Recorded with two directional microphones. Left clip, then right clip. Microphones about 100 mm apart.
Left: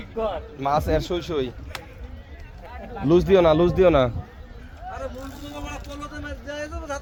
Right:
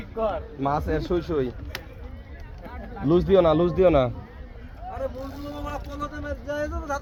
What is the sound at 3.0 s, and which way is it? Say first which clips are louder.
A man's voice: left 2 dB; 40° left (ahead or behind).